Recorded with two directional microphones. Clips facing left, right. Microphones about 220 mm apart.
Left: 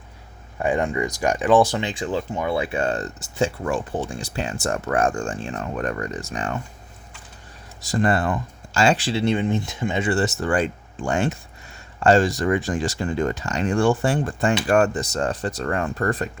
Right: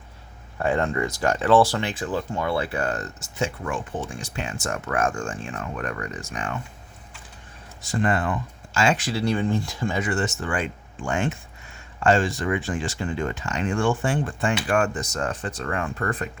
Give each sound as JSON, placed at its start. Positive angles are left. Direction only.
{"t": 0.6, "sound": "speech", "side_deg": 15}
{"t": 2.8, "sound": "speech", "side_deg": 30}
{"t": 7.8, "sound": "speech", "side_deg": 40}